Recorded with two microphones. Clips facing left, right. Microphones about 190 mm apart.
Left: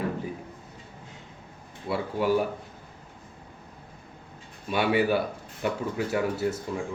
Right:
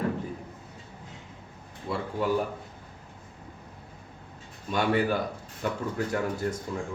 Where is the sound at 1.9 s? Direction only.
10° left (ahead or behind).